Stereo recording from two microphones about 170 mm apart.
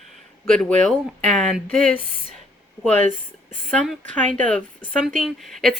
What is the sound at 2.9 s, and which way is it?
Speech, 45° right (ahead or behind).